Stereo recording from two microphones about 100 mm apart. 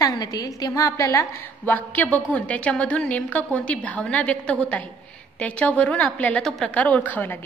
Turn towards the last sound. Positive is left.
turn(degrees=15)  # may be behind; listen again after turning